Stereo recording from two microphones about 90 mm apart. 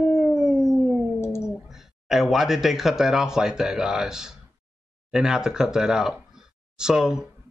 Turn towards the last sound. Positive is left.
turn(degrees=-5)  # may be behind; listen again after turning